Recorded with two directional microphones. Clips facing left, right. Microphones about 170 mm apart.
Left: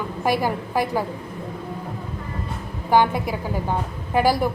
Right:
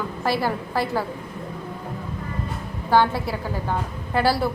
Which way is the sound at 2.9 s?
15° left (ahead or behind).